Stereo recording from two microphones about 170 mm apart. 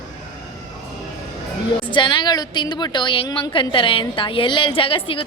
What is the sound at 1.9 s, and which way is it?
A woman's voice, 25° left (ahead or behind).